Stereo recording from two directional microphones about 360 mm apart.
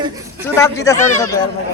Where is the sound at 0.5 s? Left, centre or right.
Centre.